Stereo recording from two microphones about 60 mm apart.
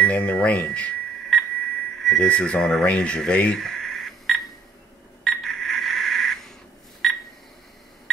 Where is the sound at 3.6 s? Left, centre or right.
Centre.